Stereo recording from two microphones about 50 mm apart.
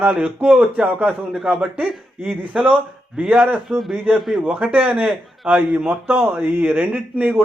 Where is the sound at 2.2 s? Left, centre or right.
Right.